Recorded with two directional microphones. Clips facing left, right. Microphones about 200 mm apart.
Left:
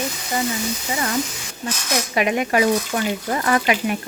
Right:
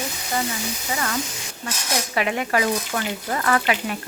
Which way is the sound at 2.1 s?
15° left (ahead or behind).